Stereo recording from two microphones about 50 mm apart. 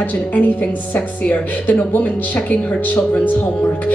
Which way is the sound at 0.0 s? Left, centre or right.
Left.